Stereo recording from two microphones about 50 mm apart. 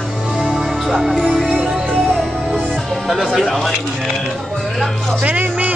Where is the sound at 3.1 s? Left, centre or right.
Centre.